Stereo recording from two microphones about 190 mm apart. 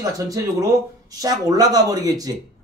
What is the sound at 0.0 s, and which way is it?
A man's voice, 20° right (ahead or behind).